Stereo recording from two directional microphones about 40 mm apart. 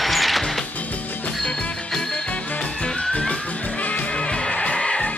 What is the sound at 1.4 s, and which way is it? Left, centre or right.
Music, centre.